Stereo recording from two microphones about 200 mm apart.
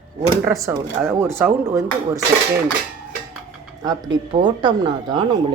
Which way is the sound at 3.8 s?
20° right (ahead or behind).